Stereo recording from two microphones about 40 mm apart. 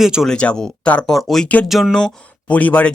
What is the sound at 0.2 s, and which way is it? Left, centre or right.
Speech, centre.